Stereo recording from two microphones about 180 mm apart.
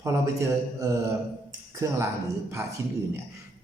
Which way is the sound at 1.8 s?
15° right (ahead or behind).